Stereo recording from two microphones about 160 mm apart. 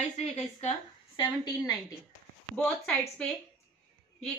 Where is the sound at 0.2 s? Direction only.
45° left (ahead or behind).